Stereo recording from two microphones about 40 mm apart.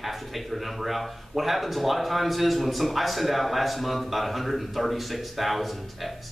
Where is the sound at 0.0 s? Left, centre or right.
Centre.